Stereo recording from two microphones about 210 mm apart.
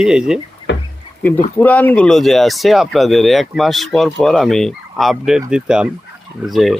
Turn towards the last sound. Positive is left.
turn(degrees=0)  # may be behind; listen again after turning